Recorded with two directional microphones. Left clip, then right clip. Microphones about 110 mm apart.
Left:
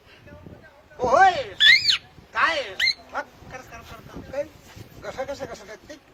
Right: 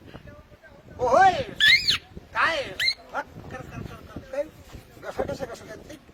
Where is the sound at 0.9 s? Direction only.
30° right (ahead or behind).